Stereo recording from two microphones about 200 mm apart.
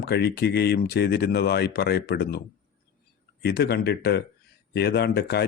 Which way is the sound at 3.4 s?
55° left (ahead or behind).